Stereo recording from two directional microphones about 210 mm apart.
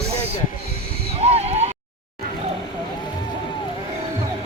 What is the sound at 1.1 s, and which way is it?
Neigh, 30° right (ahead or behind).